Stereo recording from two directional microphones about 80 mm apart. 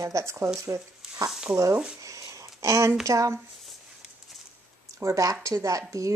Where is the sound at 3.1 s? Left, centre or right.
Right.